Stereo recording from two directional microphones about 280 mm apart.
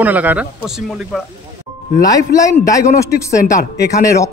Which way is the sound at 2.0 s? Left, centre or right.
Centre.